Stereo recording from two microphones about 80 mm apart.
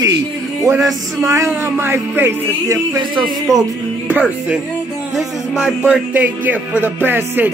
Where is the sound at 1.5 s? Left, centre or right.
Right.